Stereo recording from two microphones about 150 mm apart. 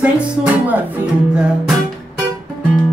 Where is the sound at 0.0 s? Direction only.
10° right (ahead or behind).